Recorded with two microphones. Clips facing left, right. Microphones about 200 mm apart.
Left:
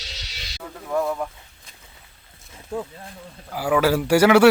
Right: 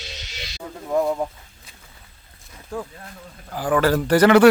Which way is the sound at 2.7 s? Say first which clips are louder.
Left 1 dB; 20° left (ahead or behind).